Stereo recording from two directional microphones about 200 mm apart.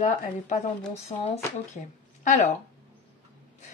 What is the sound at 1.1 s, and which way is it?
Speech, 30° left (ahead or behind).